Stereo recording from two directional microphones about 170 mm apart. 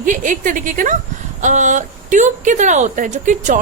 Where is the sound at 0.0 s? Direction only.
50° right (ahead or behind).